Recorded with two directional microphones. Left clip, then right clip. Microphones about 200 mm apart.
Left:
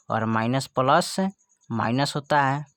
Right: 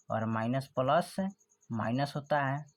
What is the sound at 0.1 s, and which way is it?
Speech, 40° left (ahead or behind).